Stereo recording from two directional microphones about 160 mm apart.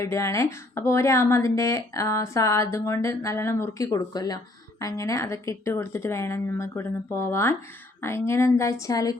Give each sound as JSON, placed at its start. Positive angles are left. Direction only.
{"t": 0.0, "sound": "speech", "side_deg": 20}